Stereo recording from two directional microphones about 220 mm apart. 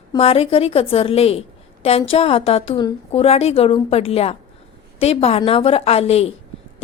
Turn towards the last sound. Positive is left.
turn(degrees=25)  # may be behind; listen again after turning